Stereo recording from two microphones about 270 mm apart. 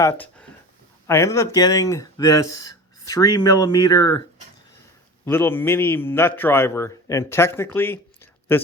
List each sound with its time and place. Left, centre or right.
0.0 s a man's voice: centre
5.2 s a man's voice: centre